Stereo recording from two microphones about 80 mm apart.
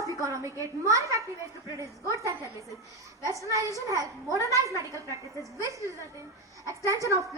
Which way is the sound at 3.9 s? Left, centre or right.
Left.